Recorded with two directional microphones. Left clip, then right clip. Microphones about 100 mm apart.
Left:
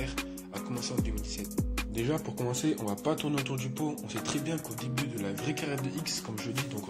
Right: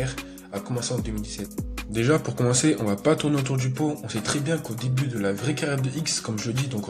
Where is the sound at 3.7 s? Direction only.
15° left (ahead or behind).